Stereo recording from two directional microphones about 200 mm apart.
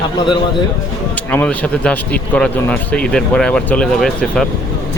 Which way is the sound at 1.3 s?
5° left (ahead or behind).